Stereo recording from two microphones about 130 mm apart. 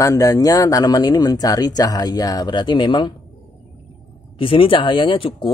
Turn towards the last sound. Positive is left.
turn(degrees=40)  # may be behind; listen again after turning